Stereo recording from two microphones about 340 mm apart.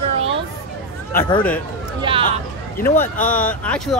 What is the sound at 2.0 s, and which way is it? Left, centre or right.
Speech, centre.